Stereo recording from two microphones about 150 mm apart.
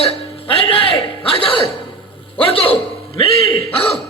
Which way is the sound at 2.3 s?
35° left (ahead or behind).